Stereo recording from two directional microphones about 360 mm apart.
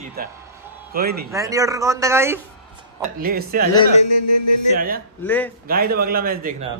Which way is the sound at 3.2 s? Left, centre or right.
Right.